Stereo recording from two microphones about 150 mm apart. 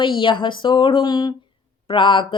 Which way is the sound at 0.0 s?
35° left (ahead or behind).